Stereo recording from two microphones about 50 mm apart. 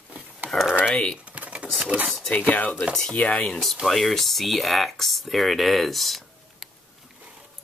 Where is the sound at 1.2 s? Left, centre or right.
Right.